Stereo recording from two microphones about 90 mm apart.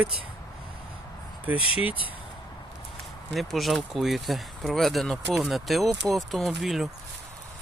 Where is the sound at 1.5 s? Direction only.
15° right (ahead or behind).